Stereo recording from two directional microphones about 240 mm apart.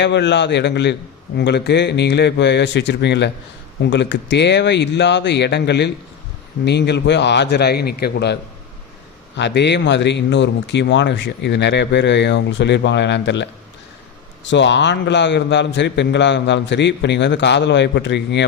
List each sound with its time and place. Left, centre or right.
0.0 s speech: left
14.5 s speech: left